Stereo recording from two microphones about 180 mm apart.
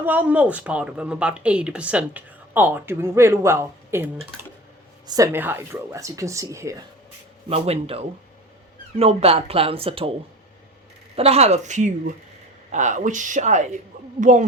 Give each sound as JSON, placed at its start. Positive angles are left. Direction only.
{"t": 0.0, "sound": "speech", "side_deg": -10}
{"t": 7.5, "sound": "speech", "side_deg": -35}
{"t": 11.2, "sound": "speech", "side_deg": -35}